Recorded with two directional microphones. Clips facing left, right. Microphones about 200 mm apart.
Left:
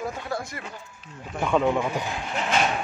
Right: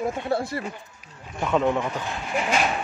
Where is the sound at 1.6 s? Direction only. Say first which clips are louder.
Even; 10° left (ahead or behind).